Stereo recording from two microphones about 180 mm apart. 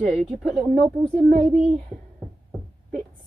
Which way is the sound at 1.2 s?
50° right (ahead or behind).